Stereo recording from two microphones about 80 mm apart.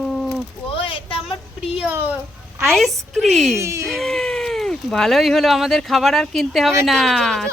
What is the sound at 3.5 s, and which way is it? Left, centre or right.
Speech, right.